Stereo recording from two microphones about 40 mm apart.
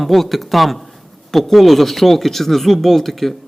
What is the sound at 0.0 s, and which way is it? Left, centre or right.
A man's voice, centre.